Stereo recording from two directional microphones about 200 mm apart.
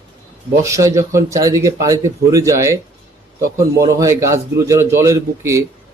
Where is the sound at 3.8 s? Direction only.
15° right (ahead or behind).